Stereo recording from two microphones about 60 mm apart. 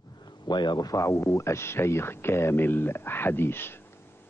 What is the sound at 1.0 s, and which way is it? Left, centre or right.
Speech, left.